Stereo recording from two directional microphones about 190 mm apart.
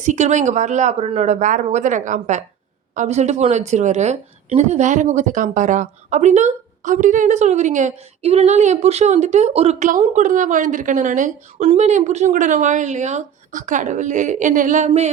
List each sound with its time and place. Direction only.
0.0 s speech: 40° right (ahead or behind)